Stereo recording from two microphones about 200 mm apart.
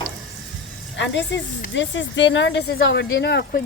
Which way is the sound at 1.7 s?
65° left (ahead or behind).